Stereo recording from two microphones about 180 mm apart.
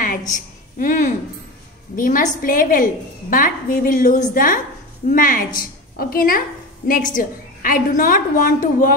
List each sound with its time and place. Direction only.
0.3 s a woman's voice: 50° left (ahead or behind)